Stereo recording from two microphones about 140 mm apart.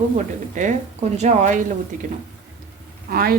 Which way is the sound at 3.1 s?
90° right.